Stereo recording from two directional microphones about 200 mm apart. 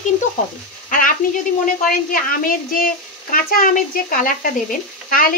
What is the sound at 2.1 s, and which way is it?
Speech, 45° left (ahead or behind).